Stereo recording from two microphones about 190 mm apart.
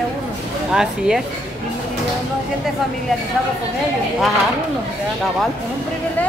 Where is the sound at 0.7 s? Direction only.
5° right (ahead or behind).